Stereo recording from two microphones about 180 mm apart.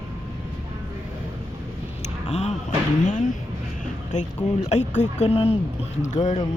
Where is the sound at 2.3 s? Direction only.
35° left (ahead or behind).